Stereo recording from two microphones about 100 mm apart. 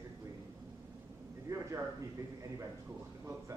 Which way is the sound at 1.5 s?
30° right (ahead or behind).